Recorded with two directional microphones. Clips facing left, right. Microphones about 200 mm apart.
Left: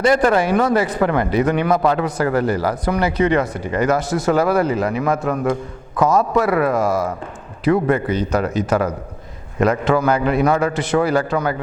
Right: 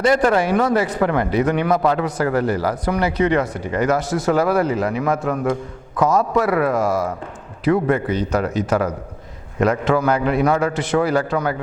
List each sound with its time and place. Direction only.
0.0 s a man's voice: 10° left (ahead or behind)